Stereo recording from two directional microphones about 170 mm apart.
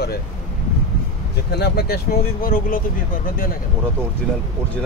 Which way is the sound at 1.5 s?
70° left (ahead or behind).